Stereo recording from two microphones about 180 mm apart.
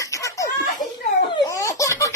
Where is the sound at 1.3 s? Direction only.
20° left (ahead or behind).